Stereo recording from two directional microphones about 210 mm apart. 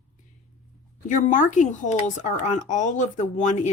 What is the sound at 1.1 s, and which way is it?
Speech, 35° left (ahead or behind).